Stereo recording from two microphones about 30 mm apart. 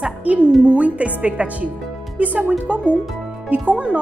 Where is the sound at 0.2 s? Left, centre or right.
Right.